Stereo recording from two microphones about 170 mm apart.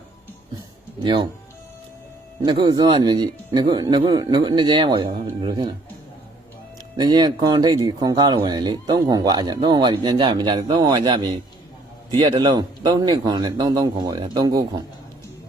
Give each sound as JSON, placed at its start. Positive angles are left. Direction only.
{"t": 1.0, "sound": "speech", "side_deg": -30}
{"t": 2.4, "sound": "speech", "side_deg": -25}
{"t": 6.9, "sound": "speech", "side_deg": -25}